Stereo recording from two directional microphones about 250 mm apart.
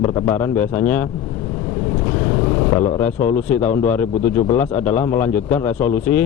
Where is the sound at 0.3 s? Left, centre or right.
Centre.